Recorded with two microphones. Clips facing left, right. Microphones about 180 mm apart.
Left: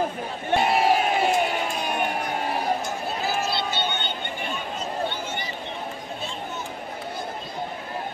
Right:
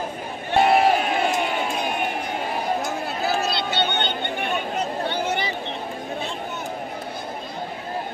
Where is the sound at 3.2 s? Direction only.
65° right (ahead or behind).